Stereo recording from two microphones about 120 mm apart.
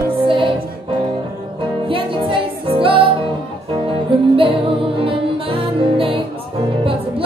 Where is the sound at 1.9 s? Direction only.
45° right (ahead or behind).